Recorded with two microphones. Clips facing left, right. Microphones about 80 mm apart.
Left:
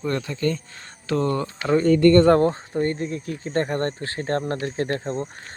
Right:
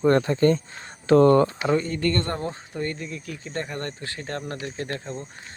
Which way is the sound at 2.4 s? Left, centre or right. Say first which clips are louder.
Left 8 dB; left.